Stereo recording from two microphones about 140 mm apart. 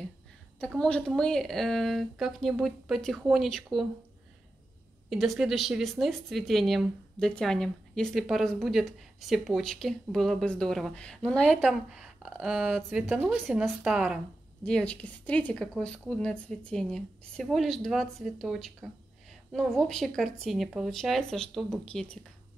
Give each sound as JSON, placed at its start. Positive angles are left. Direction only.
{"t": 0.7, "sound": "speech", "side_deg": 5}
{"t": 5.1, "sound": "speech", "side_deg": 0}
{"t": 14.6, "sound": "speech", "side_deg": 5}